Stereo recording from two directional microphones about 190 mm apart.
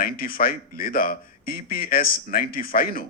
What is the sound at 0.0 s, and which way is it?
Speech, 50° left (ahead or behind).